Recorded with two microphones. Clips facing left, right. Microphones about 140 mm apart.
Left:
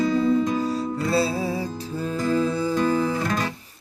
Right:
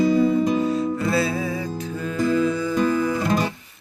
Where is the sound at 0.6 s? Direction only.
30° left (ahead or behind).